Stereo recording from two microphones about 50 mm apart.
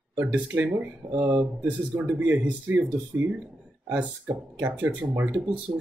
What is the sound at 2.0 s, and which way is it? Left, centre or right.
Speech, right.